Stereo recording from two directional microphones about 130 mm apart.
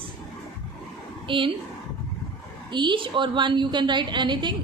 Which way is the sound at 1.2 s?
40° right (ahead or behind).